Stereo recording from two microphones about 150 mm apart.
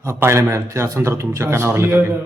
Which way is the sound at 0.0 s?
15° right (ahead or behind).